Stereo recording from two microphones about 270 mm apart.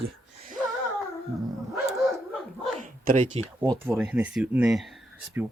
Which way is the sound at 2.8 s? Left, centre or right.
Right.